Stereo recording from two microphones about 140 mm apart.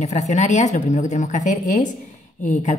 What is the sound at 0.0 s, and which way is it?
A woman's voice, 55° left (ahead or behind).